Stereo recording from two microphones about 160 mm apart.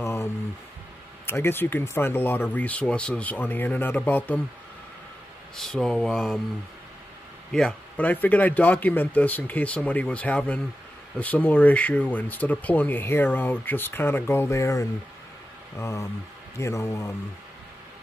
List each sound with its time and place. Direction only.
0.0 s a sound: 15° left (ahead or behind)
1.2 s speech: 15° left (ahead or behind)
5.6 s speech: 5° left (ahead or behind)
7.5 s speech: 5° left (ahead or behind)